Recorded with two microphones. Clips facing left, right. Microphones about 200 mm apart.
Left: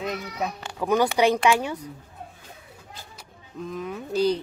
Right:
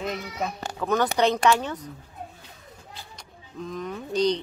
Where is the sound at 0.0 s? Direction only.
Centre (ahead or behind).